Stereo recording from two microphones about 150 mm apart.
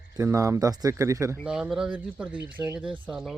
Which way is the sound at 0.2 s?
20° right (ahead or behind).